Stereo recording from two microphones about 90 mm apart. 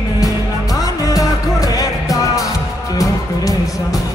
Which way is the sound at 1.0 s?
40° left (ahead or behind).